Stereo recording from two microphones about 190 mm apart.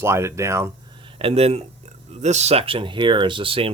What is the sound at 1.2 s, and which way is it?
Speech, 30° right (ahead or behind).